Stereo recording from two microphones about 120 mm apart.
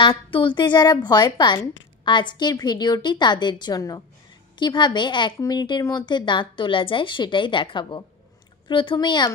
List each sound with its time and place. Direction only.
0.0 s a woman's voice: 45° left (ahead or behind)